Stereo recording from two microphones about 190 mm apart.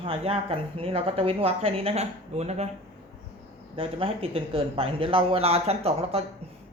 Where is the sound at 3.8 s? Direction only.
30° right (ahead or behind).